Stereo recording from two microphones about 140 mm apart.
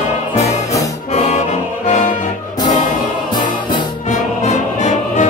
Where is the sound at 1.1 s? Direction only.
50° left (ahead or behind).